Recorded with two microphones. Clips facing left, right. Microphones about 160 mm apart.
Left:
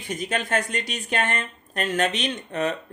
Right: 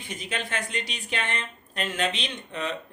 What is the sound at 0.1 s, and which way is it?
Speech, 45° left (ahead or behind).